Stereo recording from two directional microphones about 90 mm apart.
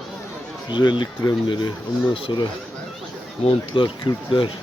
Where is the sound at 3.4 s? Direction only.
70° left (ahead or behind).